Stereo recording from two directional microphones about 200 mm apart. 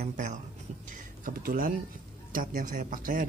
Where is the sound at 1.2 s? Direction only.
45° right (ahead or behind).